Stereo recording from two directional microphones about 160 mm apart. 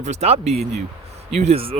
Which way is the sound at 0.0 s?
45° right (ahead or behind).